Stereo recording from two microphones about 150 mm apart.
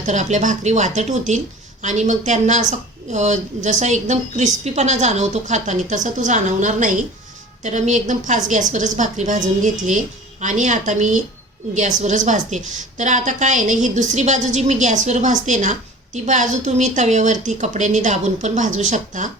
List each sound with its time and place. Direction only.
0.0 s a woman's voice: 55° right (ahead or behind)